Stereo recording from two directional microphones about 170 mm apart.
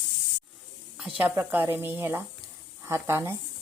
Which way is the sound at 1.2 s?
10° right (ahead or behind).